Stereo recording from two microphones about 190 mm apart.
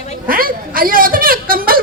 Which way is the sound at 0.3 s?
50° right (ahead or behind).